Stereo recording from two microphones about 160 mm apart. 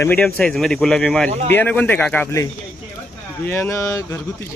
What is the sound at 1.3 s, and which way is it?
Speech, 45° right (ahead or behind).